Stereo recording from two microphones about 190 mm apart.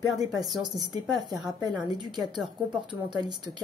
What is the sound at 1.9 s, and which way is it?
Speech, 25° right (ahead or behind).